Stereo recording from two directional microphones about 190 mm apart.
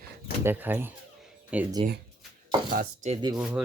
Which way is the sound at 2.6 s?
45° right (ahead or behind).